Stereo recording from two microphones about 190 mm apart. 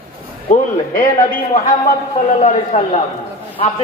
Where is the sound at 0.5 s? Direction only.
45° left (ahead or behind).